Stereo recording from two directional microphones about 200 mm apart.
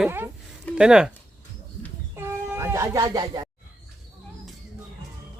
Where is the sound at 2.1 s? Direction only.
10° right (ahead or behind).